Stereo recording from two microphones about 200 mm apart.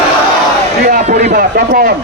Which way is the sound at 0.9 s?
35° right (ahead or behind).